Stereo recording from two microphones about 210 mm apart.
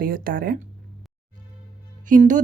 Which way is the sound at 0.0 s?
45° right (ahead or behind).